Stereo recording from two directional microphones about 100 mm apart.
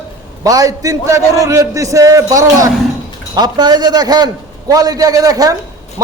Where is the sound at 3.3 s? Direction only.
45° right (ahead or behind).